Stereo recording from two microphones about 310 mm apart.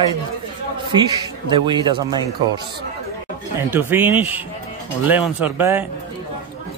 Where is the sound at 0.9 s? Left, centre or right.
Centre.